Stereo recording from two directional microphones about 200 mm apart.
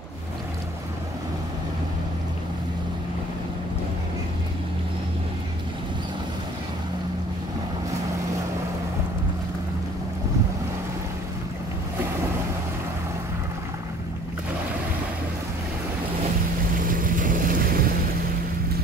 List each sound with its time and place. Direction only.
16.8 s vehicle: 45° right (ahead or behind)